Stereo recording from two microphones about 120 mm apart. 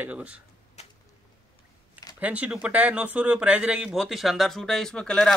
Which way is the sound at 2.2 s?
10° right (ahead or behind).